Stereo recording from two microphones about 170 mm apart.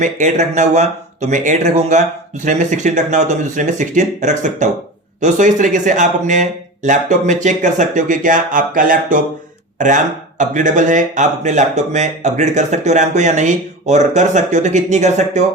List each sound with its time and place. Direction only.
0.0 s speech: 45° right (ahead or behind)